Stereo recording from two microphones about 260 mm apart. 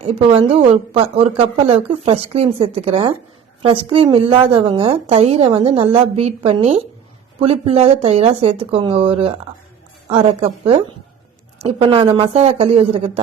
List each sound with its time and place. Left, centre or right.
0.0 s a woman's voice: right